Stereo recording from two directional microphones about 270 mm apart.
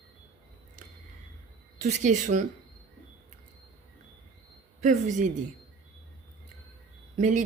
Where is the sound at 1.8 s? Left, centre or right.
Right.